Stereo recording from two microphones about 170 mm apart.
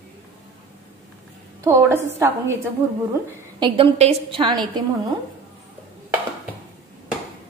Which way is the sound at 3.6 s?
30° right (ahead or behind).